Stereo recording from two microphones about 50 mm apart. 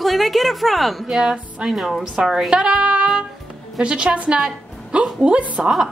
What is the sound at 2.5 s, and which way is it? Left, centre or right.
Music, centre.